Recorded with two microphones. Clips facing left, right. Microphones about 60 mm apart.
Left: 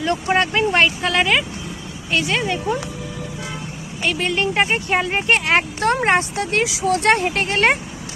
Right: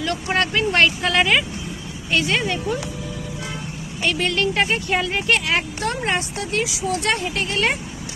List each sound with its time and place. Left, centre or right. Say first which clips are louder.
0.3 s speech: left 2 dB; centre
4.0 s speech: left 1 dB; centre
4.4 s speech: left 1 dB; left